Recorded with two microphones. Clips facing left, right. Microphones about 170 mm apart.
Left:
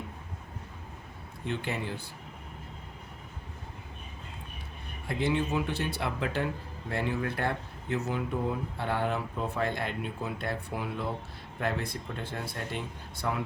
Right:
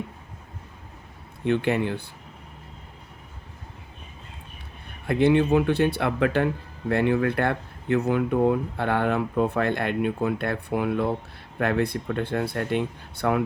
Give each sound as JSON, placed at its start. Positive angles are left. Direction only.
{"t": 1.5, "sound": "speech", "side_deg": -65}
{"t": 5.0, "sound": "speech", "side_deg": -60}